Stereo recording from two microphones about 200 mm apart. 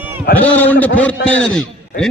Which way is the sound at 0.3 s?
10° left (ahead or behind).